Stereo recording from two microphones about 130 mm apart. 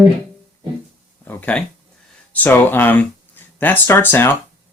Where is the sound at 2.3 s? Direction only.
15° left (ahead or behind).